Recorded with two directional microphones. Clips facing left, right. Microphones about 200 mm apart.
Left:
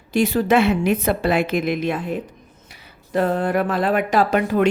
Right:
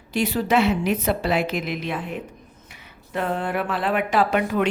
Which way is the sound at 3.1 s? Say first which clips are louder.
Left 6 dB; 40° left (ahead or behind).